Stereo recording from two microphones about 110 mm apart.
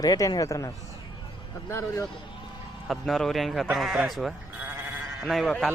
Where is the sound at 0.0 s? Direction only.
35° left (ahead or behind).